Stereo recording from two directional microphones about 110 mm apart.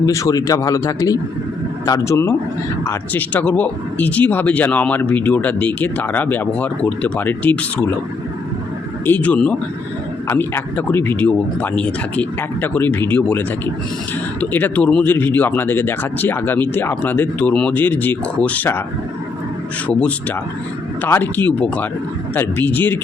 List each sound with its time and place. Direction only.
0.0 s a man's voice: 30° left (ahead or behind)
3.1 s speech: 15° left (ahead or behind)
9.0 s a man's voice: 15° left (ahead or behind)
14.5 s speech: 15° left (ahead or behind)
19.9 s speech: 10° left (ahead or behind)